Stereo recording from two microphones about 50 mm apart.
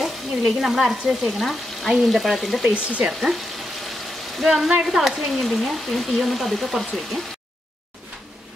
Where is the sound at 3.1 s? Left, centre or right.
Centre.